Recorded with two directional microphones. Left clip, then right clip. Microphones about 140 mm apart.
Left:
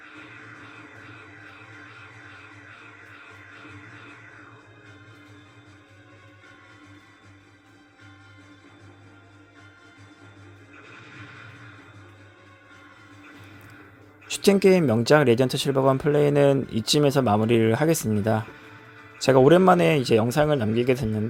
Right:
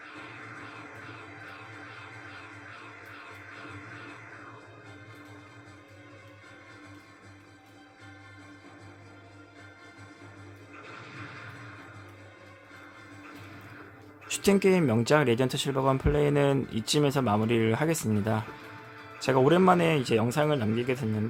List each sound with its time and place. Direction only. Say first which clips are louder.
14.3 s speech: left 6 dB; 25° left (ahead or behind)